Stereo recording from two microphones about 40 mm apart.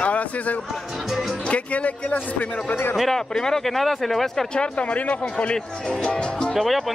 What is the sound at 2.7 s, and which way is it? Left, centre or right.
Speech, left.